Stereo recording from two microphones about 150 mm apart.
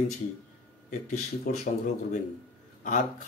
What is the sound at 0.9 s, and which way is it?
Speech, 55° left (ahead or behind).